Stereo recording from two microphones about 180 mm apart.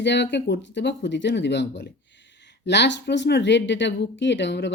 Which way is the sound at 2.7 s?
75° left (ahead or behind).